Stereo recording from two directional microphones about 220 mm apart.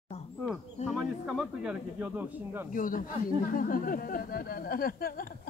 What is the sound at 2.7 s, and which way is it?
Speech, 40° left (ahead or behind).